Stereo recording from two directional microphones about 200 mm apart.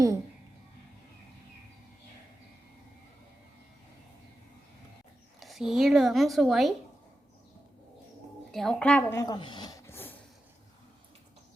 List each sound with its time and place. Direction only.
5.4 s speech: centre (ahead or behind)
8.5 s speech: 5° left (ahead or behind)